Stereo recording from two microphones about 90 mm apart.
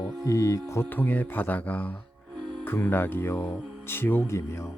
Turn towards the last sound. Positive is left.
turn(degrees=35)  # may be behind; listen again after turning